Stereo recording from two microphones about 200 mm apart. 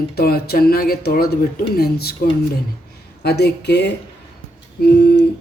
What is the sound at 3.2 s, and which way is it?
A woman's voice, 55° left (ahead or behind).